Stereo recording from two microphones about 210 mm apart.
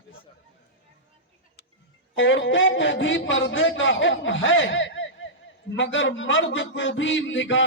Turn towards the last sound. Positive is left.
turn(degrees=60)  # may be behind; listen again after turning